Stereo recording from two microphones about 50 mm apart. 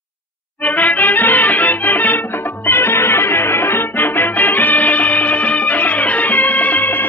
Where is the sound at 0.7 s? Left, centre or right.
Left.